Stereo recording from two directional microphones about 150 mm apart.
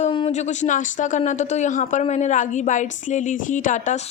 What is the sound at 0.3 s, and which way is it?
Speech, 50° left (ahead or behind).